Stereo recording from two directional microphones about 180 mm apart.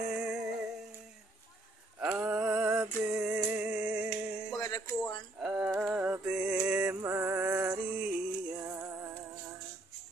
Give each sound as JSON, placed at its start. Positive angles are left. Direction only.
{"t": 0.0, "sound": "music", "side_deg": -5}
{"t": 2.1, "sound": "a sound", "side_deg": -5}
{"t": 4.6, "sound": "music", "side_deg": 20}
{"t": 5.0, "sound": "music", "side_deg": -5}